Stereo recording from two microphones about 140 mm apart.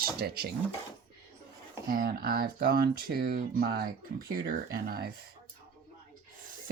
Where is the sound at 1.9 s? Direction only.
90° right.